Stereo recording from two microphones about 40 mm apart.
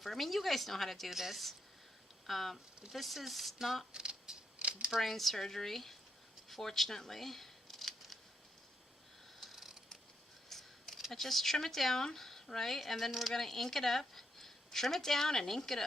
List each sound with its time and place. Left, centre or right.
0.0 s speech: centre
3.9 s a sound: right
4.9 s speech: centre
6.5 s scissors: centre
9.4 s a sound: centre
11.1 s speech: centre
13.3 s speech: centre